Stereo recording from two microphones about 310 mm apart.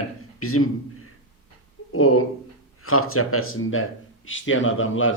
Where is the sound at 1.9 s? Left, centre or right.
Left.